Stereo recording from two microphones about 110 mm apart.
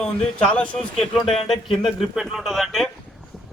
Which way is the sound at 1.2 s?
60° left (ahead or behind).